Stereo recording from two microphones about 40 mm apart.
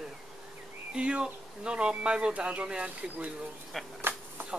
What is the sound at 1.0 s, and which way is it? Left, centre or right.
Speech, right.